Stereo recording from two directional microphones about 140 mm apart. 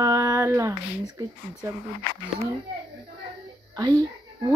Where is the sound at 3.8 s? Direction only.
30° right (ahead or behind).